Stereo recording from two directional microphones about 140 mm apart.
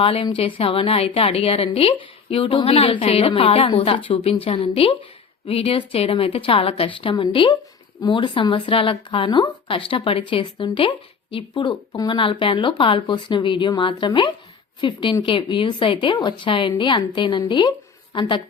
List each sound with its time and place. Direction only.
0.0 s a woman's voice: 40° left (ahead or behind)